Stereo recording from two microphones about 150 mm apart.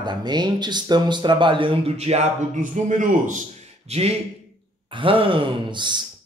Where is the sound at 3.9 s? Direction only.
45° right (ahead or behind).